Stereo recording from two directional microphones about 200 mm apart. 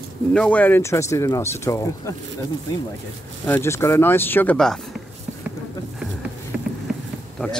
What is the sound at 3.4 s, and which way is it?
Speech, 10° left (ahead or behind).